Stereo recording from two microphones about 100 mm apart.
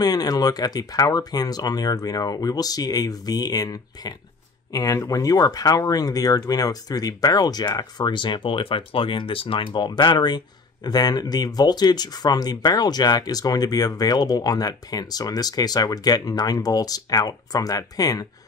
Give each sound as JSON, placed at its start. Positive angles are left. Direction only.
{"t": 0.0, "sound": "speech", "side_deg": 40}